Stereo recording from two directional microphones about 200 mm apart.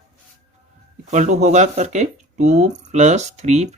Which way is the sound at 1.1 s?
35° right (ahead or behind).